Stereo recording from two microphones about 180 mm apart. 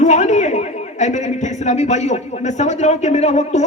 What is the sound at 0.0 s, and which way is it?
A man's voice, 40° left (ahead or behind).